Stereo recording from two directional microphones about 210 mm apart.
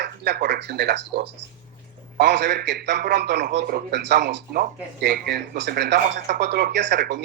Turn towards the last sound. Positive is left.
turn(degrees=-55)  # may be behind; listen again after turning